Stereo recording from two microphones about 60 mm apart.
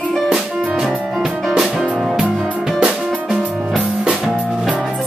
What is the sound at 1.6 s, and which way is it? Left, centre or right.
Music, centre.